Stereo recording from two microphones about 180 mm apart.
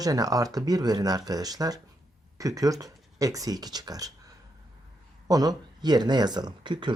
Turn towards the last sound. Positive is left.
turn(degrees=-25)  # may be behind; listen again after turning